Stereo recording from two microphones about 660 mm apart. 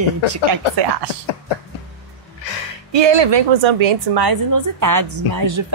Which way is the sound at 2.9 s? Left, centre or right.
Right.